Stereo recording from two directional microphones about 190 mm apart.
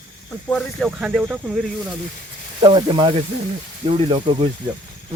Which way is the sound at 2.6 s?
25° right (ahead or behind).